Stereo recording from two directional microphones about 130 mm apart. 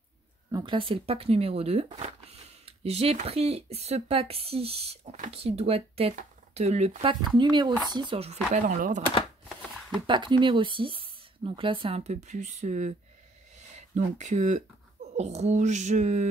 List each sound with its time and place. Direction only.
0.5 s speech: 35° right (ahead or behind); by 6.9 s 55° right (ahead or behind)
7.0 s speech: 40° right (ahead or behind)
8.6 s speech: 90° right
10.0 s speech: 40° right (ahead or behind)
12.0 s speech: 60° right (ahead or behind)
15.1 s a sound: 60° right (ahead or behind)